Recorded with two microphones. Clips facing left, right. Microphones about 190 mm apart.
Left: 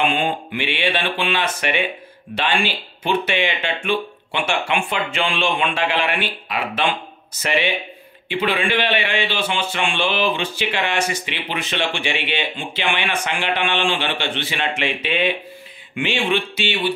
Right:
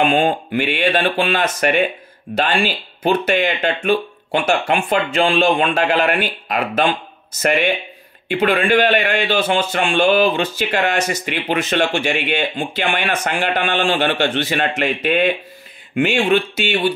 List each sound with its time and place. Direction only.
0.0 s a man's voice: 45° right (ahead or behind)